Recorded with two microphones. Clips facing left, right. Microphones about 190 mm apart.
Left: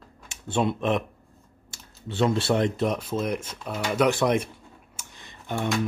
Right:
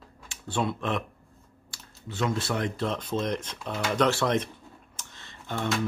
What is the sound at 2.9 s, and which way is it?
Speech, 10° left (ahead or behind).